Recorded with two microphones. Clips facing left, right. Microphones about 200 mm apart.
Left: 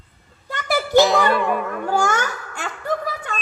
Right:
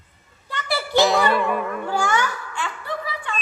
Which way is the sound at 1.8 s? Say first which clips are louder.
Left 3 dB; 45° left (ahead or behind).